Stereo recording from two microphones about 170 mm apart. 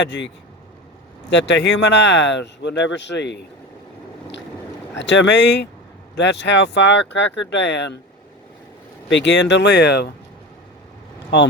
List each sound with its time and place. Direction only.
0.0 s speech: 90° left
1.3 s speech: 90° left
4.9 s speech: 90° left
9.0 s speech: 90° left; by 10.1 s 70° left (ahead or behind)